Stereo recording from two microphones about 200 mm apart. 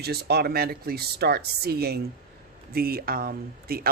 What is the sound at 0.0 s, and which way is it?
Speech, 55° right (ahead or behind).